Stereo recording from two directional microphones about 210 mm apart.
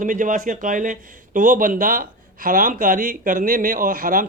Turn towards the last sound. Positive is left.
turn(degrees=-40)  # may be behind; listen again after turning